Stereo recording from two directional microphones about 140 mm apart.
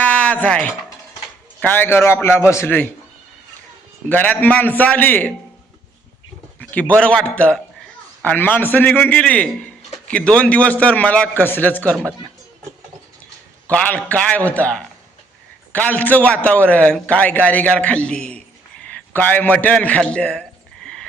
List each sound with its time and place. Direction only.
0.0 s a sound: 10° left (ahead or behind)
1.6 s a man's voice: 15° left (ahead or behind)
4.1 s a man's voice: 10° left (ahead or behind)
6.6 s a man's voice: 10° left (ahead or behind)
13.7 s a man's voice: 10° left (ahead or behind)